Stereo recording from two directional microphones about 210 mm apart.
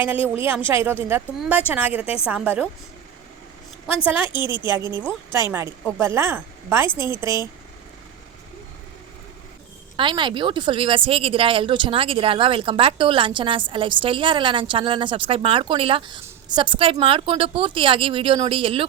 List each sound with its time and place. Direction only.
0.3 s a woman's voice: 10° right (ahead or behind)
4.1 s a woman's voice: 20° left (ahead or behind)
4.7 s a woman's voice: 15° right (ahead or behind)
6.8 s a woman's voice: 20° left (ahead or behind)
10.0 s speech: 20° right (ahead or behind)